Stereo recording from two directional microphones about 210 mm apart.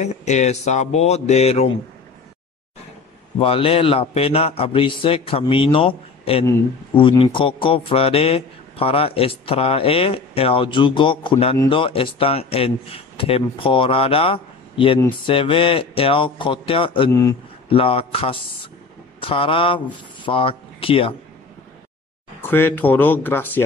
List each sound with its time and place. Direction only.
0.0 s speech: 35° left (ahead or behind)
3.3 s a man's voice: 25° left (ahead or behind)
17.1 s speech: 15° left (ahead or behind)
17.6 s a man's voice: 25° left (ahead or behind)
22.4 s speech: 10° left (ahead or behind)